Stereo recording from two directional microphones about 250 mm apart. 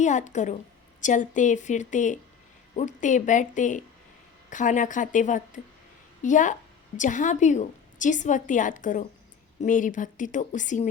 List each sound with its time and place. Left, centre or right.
0.0 s a woman's voice: left